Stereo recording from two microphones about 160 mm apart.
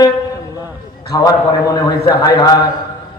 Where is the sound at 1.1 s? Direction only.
25° left (ahead or behind).